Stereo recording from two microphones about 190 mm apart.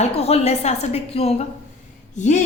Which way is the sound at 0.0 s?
30° left (ahead or behind).